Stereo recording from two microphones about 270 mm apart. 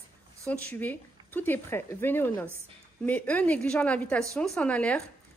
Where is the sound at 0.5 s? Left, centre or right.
Centre.